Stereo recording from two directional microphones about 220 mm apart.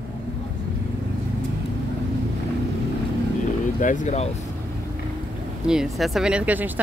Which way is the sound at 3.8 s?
35° left (ahead or behind).